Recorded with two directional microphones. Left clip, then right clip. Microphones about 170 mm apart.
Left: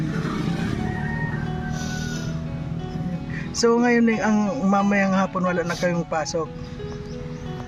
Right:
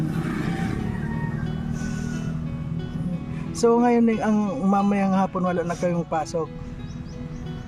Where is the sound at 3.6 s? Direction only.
20° right (ahead or behind).